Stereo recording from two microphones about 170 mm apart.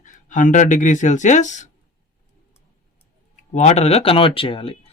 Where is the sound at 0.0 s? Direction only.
50° left (ahead or behind).